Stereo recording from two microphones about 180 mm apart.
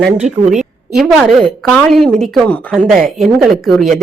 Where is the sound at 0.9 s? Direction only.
Centre (ahead or behind).